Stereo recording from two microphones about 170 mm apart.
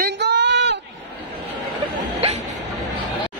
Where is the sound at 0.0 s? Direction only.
90° right.